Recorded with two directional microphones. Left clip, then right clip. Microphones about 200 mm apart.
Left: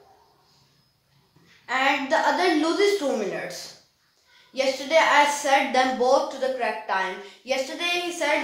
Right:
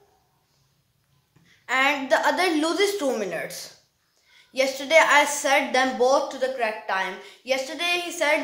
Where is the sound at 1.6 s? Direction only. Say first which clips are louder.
Right 1 dB; 20° right (ahead or behind).